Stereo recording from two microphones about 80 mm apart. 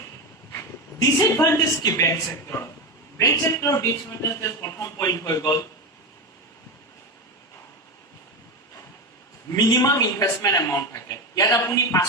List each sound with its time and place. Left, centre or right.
1.2 s speech: left
9.5 s a man's voice: left